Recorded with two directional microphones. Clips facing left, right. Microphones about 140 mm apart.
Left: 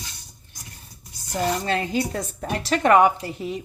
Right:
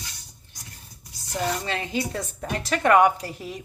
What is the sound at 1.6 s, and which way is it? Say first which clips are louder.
A woman's voice: left 4 dB; 45° left (ahead or behind).